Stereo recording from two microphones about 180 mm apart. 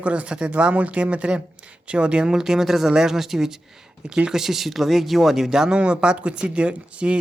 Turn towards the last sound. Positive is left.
turn(degrees=-5)  # may be behind; listen again after turning